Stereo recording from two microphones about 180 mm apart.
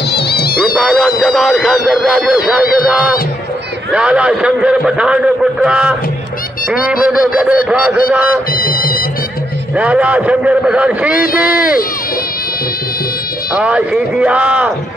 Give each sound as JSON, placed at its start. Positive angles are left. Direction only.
{"t": 0.2, "sound": "music", "side_deg": 60}
{"t": 0.7, "sound": "a man's voice", "side_deg": 0}
{"t": 8.5, "sound": "music", "side_deg": 50}
{"t": 9.8, "sound": "a man's voice", "side_deg": -5}
{"t": 11.5, "sound": "speech", "side_deg": 55}
{"t": 13.6, "sound": "a man's voice", "side_deg": -5}